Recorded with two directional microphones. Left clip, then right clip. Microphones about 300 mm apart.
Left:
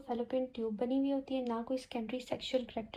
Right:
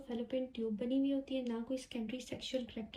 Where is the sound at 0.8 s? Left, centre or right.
Centre.